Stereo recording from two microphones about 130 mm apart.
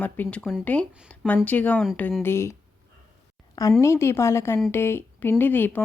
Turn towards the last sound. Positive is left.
turn(degrees=15)  # may be behind; listen again after turning